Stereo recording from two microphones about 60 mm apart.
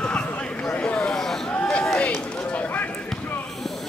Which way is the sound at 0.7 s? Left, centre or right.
Centre.